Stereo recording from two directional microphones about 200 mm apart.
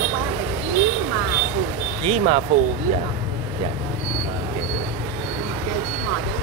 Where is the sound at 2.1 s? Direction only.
30° right (ahead or behind).